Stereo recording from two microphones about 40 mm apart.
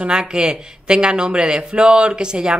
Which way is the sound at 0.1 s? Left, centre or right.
Centre.